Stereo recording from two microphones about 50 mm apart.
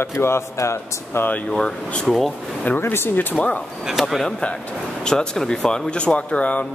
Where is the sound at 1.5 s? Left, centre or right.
Centre.